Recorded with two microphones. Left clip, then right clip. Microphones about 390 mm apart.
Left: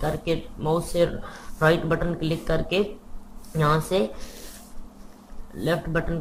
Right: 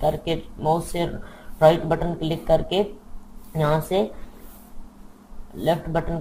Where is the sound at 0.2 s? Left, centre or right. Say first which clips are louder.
Right 1 dB; centre.